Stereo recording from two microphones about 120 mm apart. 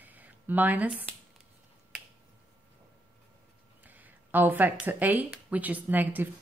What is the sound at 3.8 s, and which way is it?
Speech, 15° right (ahead or behind).